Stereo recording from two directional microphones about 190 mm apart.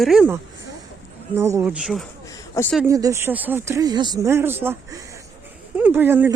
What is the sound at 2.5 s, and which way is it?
Speech, 10° left (ahead or behind).